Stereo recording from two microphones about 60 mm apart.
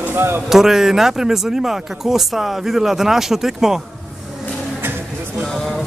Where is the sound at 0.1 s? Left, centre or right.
Right.